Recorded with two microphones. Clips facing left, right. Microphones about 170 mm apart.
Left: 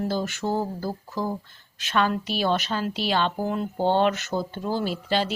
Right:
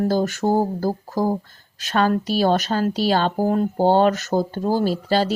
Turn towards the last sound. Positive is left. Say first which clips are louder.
# right 6 dB
turn(degrees=-40)  # may be behind; listen again after turning